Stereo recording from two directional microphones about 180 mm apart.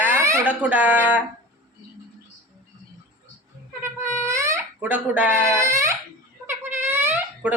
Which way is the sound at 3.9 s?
15° right (ahead or behind).